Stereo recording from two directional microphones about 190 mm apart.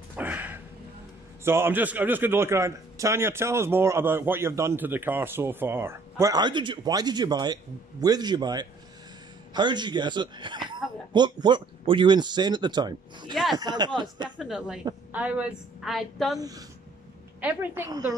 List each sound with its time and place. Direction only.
0.1 s a sound: 10° right (ahead or behind)
1.4 s a man's voice: 15° right (ahead or behind)
13.3 s a woman's voice: centre (ahead or behind)
13.6 s speech: 20° right (ahead or behind)
14.3 s a woman's voice: 5° right (ahead or behind)
16.3 s a man's voice: 20° right (ahead or behind)